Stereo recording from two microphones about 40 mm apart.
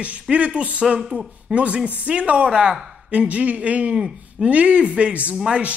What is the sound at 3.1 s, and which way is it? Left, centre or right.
Speech, right.